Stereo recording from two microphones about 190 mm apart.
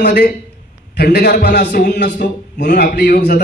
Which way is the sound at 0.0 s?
65° left (ahead or behind).